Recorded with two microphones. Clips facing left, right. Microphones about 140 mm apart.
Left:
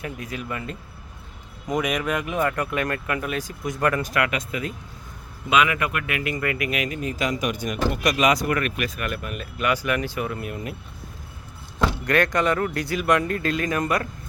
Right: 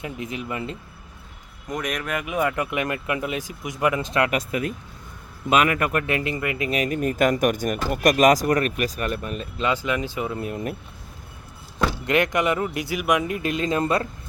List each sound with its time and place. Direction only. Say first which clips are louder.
0.0 s speech: right 1 dB; 20° right (ahead or behind)
1.6 s speech: left 4 dB; centre (ahead or behind); by 4.1 s 15° right (ahead or behind)
4.1 s speech: right 2 dB; 35° right (ahead or behind)
6.4 s speech: even; 20° right (ahead or behind)
6.7 s speech: right 4 dB; 40° right (ahead or behind); by 10.4 s 20° right (ahead or behind)
10.4 s speech: right 3 dB; 40° right (ahead or behind)
12.0 s speech: even; 20° right (ahead or behind)